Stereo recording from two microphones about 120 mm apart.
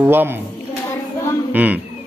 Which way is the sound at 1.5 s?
15° right (ahead or behind).